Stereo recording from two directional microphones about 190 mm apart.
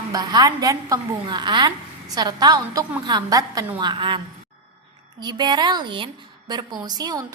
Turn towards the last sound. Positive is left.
turn(degrees=-20)  # may be behind; listen again after turning